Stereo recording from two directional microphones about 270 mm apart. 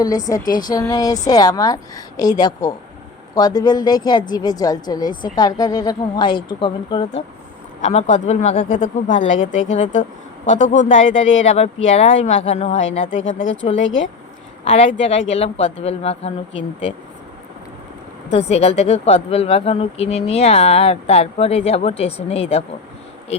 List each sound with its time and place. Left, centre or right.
0.0 s a woman's voice: centre
11.0 s speech: left
11.4 s speech: left
13.1 s speech: left
14.6 s speech: left
18.3 s speech: left